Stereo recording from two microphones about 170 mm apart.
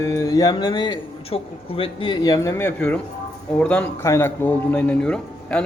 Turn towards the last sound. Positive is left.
turn(degrees=5)  # may be behind; listen again after turning